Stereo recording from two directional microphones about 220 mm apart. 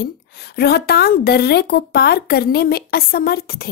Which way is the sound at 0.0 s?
50° left (ahead or behind).